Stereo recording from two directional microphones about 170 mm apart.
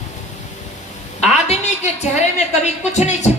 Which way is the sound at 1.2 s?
40° left (ahead or behind).